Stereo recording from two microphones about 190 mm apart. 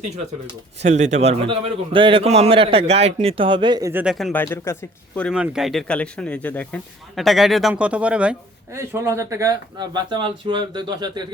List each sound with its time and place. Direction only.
0.8 s a man's voice: 40° right (ahead or behind); by 4.0 s 20° right (ahead or behind)
4.0 s speech: centre (ahead or behind)
5.3 s speech: 5° right (ahead or behind); by 11.2 s 25° right (ahead or behind)